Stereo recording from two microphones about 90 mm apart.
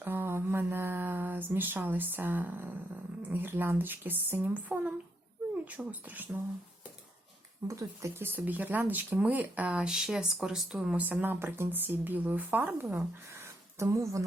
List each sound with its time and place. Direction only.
0.0 s speech: 25° right (ahead or behind)
7.7 s speech: 35° right (ahead or behind); by 11.0 s 5° right (ahead or behind)
11.0 s speech: 20° right (ahead or behind)
13.4 s a sound: 30° right (ahead or behind)